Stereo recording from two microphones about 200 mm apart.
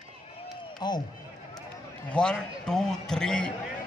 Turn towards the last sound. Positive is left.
turn(degrees=5)  # may be behind; listen again after turning